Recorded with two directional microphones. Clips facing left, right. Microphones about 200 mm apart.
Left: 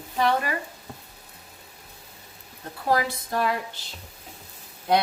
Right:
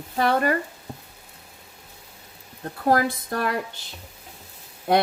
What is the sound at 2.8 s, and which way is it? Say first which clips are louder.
Speech: right 3 dB; 50° right (ahead or behind).